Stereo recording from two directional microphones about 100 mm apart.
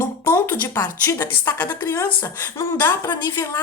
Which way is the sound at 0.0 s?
30° left (ahead or behind).